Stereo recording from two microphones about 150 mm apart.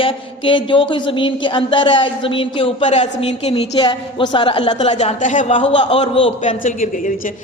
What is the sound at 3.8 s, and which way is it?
A man's voice, 30° left (ahead or behind).